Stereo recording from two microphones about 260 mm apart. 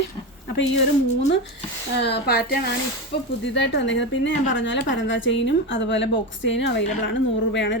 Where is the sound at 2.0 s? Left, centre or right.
Left.